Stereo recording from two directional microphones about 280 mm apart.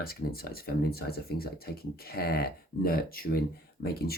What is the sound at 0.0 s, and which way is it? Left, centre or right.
Speech, left.